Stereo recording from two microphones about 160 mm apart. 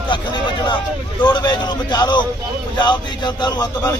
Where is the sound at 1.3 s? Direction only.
25° left (ahead or behind).